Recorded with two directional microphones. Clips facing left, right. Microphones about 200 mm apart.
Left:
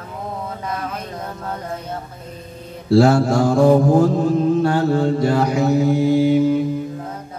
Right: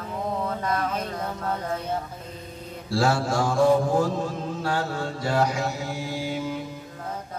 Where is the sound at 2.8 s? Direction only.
60° left (ahead or behind).